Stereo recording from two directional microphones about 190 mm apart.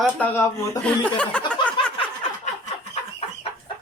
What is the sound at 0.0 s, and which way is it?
Speech, 10° left (ahead or behind).